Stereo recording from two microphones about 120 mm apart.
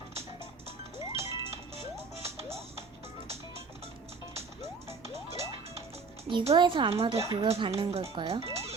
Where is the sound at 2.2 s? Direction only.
55° right (ahead or behind).